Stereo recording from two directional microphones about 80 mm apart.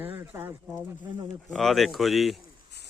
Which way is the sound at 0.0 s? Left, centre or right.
Right.